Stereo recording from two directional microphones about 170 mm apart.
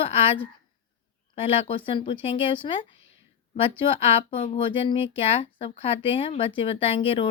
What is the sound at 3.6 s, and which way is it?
Speech, 35° left (ahead or behind).